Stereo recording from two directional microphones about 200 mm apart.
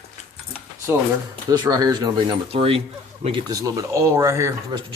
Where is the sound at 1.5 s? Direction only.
20° right (ahead or behind).